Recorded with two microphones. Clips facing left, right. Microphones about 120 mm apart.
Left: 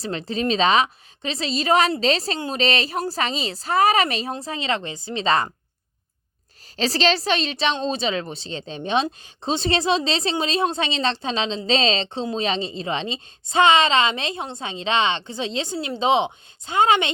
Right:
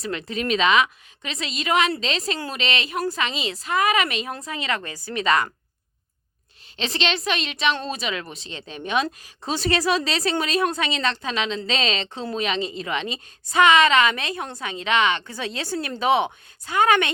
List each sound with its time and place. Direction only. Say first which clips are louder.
0.0 s a woman's voice: left 3 dB; 30° left (ahead or behind)
6.7 s a woman's voice: left 5 dB; 35° left (ahead or behind)